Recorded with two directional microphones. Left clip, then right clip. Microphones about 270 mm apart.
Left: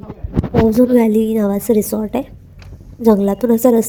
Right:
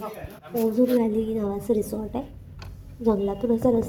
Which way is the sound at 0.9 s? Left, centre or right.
Left.